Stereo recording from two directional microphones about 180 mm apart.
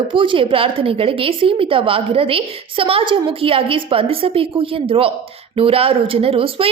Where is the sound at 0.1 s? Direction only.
30° right (ahead or behind).